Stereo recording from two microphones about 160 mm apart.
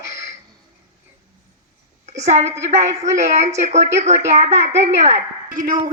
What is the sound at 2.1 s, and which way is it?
A woman's voice, 45° right (ahead or behind).